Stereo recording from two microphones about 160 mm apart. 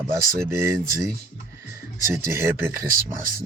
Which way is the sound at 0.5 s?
15° right (ahead or behind).